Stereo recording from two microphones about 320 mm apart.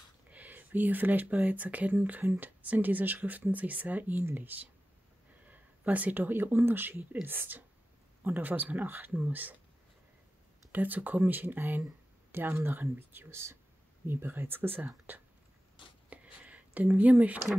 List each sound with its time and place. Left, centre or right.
0.3 s speech: centre
10.7 s speech: centre
16.1 s a sound: centre